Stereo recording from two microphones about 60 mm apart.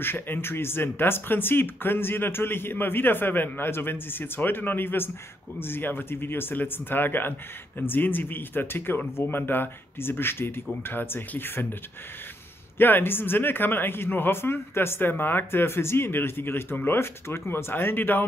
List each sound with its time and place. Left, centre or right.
0.0 s speech: left
12.7 s speech: left